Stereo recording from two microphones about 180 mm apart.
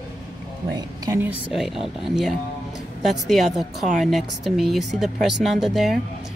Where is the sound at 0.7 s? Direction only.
20° right (ahead or behind).